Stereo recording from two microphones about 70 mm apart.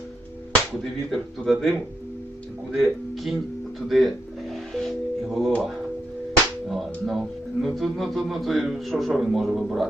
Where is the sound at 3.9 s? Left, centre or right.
Centre.